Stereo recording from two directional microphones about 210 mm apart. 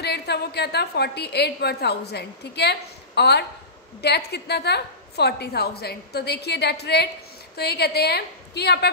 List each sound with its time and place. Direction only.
0.0 s a woman's voice: 50° left (ahead or behind)